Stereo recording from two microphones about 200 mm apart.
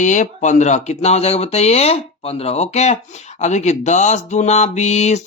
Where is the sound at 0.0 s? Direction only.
35° left (ahead or behind).